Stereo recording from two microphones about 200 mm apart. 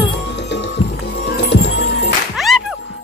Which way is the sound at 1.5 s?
60° left (ahead or behind).